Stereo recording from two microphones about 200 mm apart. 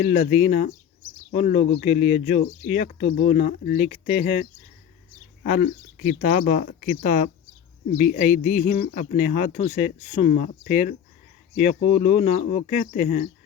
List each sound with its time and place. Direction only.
0.3 s speech: 35° left (ahead or behind)